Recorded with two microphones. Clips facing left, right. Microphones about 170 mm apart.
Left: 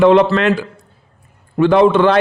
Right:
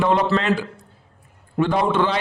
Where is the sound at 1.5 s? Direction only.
90° left.